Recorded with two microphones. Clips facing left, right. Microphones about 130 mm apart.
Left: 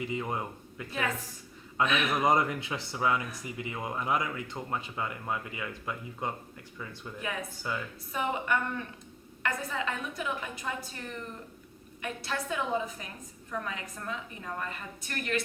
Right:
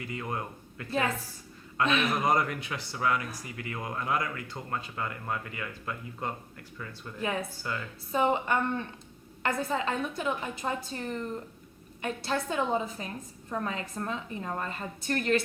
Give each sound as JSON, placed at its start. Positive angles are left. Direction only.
{"t": 0.0, "sound": "speech", "side_deg": 20}
{"t": 0.9, "sound": "a woman's voice", "side_deg": -30}
{"t": 2.2, "sound": "speech", "side_deg": 20}
{"t": 8.1, "sound": "a woman's voice", "side_deg": -30}